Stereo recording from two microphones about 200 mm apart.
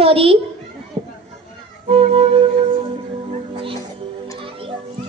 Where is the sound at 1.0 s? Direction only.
35° right (ahead or behind).